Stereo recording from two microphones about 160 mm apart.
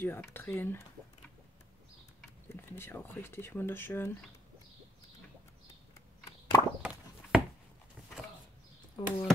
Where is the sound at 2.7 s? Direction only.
15° left (ahead or behind).